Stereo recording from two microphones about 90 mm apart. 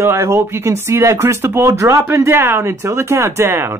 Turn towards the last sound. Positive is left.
turn(degrees=-25)  # may be behind; listen again after turning